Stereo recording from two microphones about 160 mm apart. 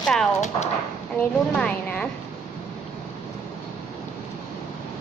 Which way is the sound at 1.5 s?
5° left (ahead or behind).